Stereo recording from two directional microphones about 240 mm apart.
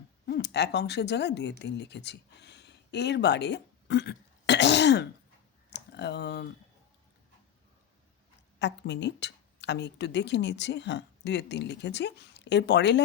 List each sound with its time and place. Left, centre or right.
0.3 s speech: left
8.5 s a woman's voice: left